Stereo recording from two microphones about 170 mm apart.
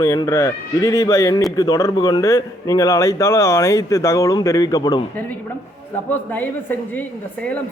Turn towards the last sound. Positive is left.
turn(degrees=10)  # may be behind; listen again after turning